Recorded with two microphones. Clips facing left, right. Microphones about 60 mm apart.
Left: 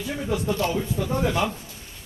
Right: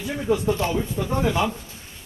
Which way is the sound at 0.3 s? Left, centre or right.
Right.